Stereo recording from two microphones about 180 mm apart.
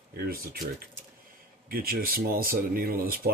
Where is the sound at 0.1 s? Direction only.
55° right (ahead or behind).